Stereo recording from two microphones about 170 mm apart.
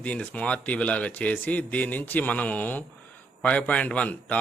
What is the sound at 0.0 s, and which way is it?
A man's voice, 10° left (ahead or behind).